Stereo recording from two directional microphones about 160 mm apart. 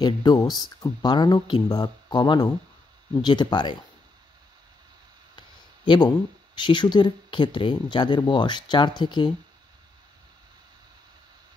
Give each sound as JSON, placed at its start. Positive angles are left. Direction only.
{"t": 0.0, "sound": "speech", "side_deg": 25}
{"t": 5.9, "sound": "speech", "side_deg": 30}